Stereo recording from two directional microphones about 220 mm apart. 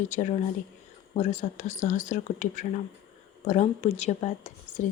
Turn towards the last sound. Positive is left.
turn(degrees=35)  # may be behind; listen again after turning